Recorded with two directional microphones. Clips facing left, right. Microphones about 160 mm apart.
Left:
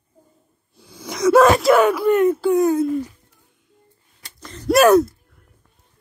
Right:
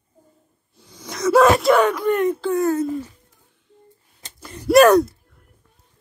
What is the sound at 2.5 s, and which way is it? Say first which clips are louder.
Speech: left 3 dB; 15° left (ahead or behind).